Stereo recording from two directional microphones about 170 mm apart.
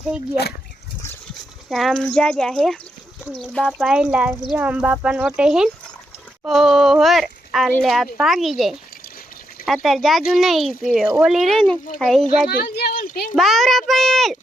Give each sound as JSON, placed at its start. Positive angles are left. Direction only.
{"t": 1.7, "sound": "speech", "side_deg": 0}
{"t": 12.5, "sound": "speech", "side_deg": 65}
{"t": 13.3, "sound": "a child's voice", "side_deg": 0}